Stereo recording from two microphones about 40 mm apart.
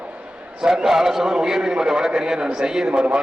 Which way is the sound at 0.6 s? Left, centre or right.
Centre.